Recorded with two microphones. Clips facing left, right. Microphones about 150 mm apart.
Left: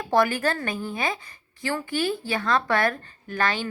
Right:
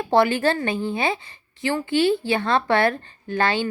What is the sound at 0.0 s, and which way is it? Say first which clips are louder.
A woman's voice: right 4 dB; 25° right (ahead or behind).